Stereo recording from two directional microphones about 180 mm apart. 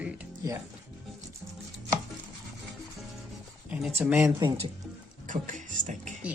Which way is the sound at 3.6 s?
5° right (ahead or behind).